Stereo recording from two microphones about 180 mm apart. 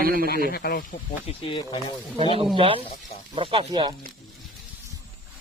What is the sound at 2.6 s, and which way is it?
Speech, 30° right (ahead or behind).